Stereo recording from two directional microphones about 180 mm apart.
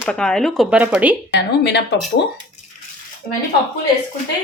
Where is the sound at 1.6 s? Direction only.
65° left (ahead or behind).